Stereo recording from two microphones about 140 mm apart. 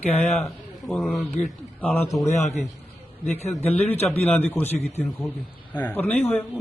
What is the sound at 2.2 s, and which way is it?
Speech, 50° left (ahead or behind).